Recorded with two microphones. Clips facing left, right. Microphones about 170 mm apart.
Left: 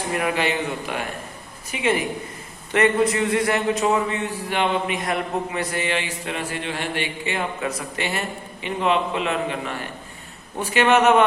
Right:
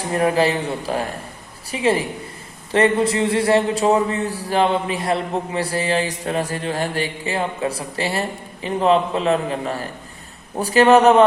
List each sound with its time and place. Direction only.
0.1 s a man's voice: 35° right (ahead or behind)